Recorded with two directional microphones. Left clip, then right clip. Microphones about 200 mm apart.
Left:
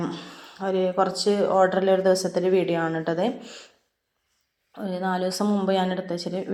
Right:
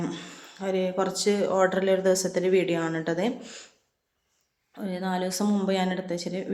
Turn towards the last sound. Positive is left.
turn(degrees=0)  # may be behind; listen again after turning